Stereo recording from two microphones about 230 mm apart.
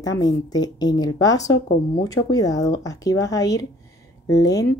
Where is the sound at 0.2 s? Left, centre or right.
Centre.